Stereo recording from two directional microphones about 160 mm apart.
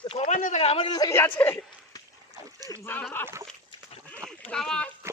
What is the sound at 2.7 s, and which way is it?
Speech, 15° left (ahead or behind).